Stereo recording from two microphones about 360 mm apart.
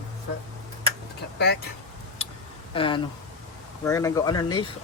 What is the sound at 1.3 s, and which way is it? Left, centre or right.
Speech, left.